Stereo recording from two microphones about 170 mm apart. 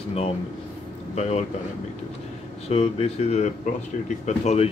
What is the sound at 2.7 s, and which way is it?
Speech, 35° left (ahead or behind).